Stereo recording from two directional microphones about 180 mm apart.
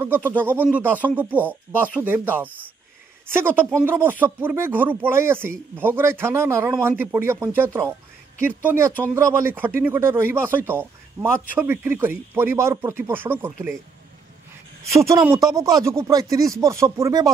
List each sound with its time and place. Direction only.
0.0 s speech: 10° right (ahead or behind)
14.9 s speech: 15° right (ahead or behind)